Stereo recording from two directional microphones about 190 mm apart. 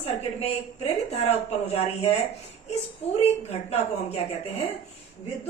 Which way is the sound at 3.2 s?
35° left (ahead or behind).